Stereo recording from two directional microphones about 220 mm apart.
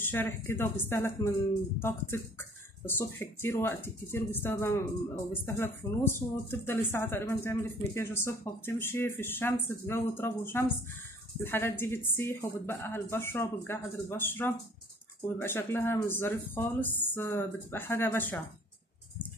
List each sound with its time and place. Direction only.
0.0 s speech: 10° left (ahead or behind)